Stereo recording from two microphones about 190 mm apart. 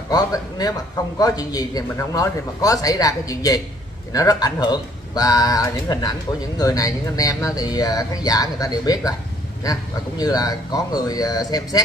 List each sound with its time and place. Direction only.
0.1 s speech: 20° left (ahead or behind)